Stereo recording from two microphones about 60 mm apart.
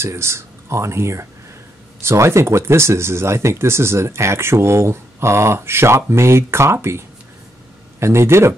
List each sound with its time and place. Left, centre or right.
0.0 s speech: right
8.0 s speech: right